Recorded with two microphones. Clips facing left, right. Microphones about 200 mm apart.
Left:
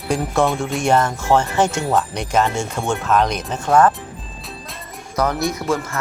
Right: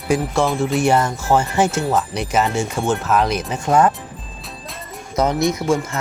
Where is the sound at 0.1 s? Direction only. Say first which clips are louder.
Even; centre (ahead or behind).